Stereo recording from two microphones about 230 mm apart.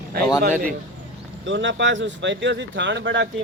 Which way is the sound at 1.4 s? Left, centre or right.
Right.